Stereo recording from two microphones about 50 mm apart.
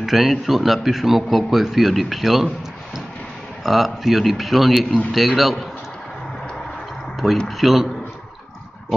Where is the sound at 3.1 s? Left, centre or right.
Centre.